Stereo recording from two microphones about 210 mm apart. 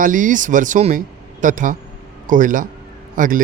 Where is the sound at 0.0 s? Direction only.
40° right (ahead or behind).